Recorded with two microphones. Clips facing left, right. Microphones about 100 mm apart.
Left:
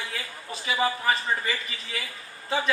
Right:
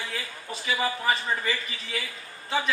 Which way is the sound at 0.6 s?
30° left (ahead or behind).